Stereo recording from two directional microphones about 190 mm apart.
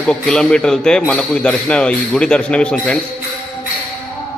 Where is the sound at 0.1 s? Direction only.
5° left (ahead or behind).